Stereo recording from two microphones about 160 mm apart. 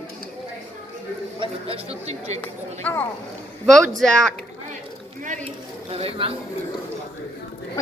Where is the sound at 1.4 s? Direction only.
40° right (ahead or behind).